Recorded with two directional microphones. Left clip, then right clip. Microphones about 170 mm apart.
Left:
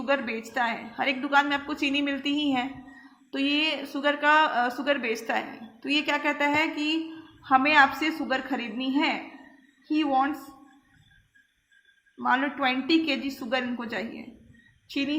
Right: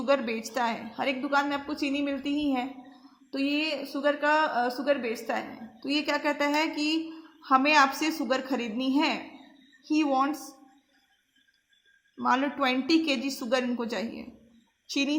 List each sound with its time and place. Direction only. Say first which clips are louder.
0.0 s a woman's voice: right 1 dB; 35° right (ahead or behind)
12.2 s a woman's voice: left 1 dB; 40° right (ahead or behind)